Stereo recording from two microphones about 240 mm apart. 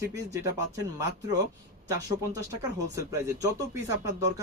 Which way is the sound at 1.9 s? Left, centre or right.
Centre.